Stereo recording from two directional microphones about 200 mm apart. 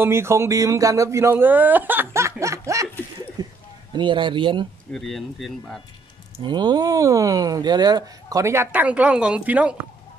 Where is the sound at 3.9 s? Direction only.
25° right (ahead or behind).